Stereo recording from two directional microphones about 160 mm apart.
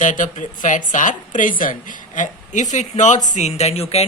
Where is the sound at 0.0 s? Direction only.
55° left (ahead or behind).